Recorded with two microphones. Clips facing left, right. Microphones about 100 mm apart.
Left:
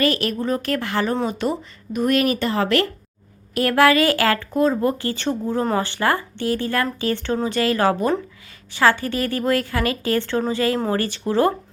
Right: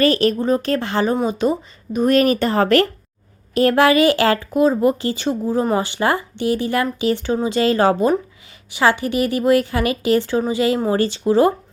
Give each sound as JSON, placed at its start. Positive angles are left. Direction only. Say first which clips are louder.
{"t": 0.0, "sound": "speech", "louder": "right 5 dB", "side_deg": -35}
{"t": 0.3, "sound": "speech", "louder": "right 4 dB", "side_deg": -25}
{"t": 2.0, "sound": "speech", "louder": "right 4 dB", "side_deg": -35}
{"t": 3.5, "sound": "speech", "louder": "right 2 dB", "side_deg": -25}